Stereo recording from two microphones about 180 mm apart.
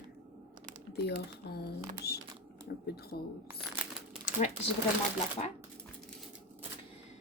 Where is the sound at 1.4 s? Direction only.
65° left (ahead or behind).